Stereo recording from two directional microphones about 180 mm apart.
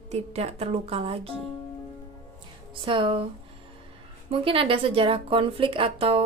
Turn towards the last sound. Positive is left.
turn(degrees=-30)  # may be behind; listen again after turning